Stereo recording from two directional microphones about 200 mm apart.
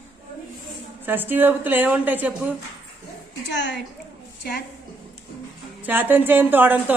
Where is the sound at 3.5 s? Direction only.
60° left (ahead or behind).